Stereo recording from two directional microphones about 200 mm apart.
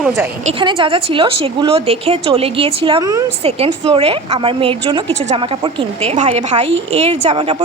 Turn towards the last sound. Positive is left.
turn(degrees=-30)  # may be behind; listen again after turning